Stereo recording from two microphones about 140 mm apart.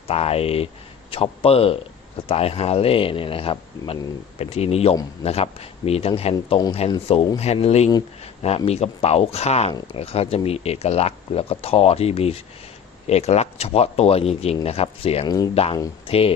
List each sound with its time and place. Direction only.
0.1 s speech: 45° left (ahead or behind)